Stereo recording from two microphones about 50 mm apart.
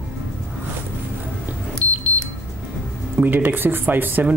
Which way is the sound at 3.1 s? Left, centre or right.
Right.